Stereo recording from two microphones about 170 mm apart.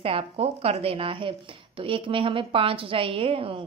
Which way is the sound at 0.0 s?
35° right (ahead or behind).